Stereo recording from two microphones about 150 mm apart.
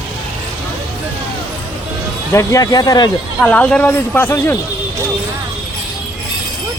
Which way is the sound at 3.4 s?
10° left (ahead or behind).